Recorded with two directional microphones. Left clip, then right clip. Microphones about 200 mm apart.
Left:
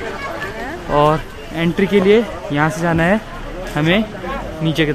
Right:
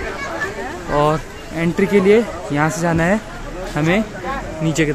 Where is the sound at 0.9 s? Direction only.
5° left (ahead or behind).